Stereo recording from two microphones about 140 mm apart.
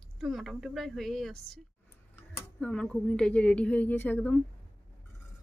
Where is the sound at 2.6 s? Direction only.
5° left (ahead or behind).